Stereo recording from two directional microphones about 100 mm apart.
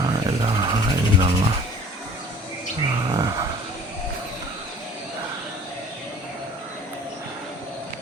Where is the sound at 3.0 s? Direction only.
45° right (ahead or behind).